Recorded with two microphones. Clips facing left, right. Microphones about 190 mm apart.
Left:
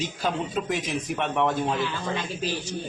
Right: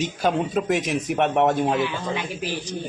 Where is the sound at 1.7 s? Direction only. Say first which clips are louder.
Right 4 dB; 15° right (ahead or behind).